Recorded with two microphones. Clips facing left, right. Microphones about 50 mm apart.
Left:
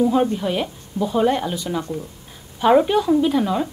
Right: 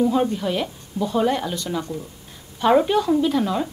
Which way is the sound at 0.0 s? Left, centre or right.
Centre.